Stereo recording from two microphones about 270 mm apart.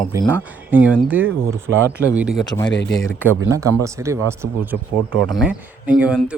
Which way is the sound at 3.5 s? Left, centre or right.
Centre.